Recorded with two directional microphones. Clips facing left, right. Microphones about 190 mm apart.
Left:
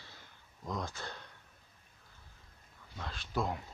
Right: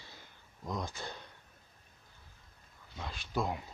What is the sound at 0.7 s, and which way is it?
Speech, 15° right (ahead or behind).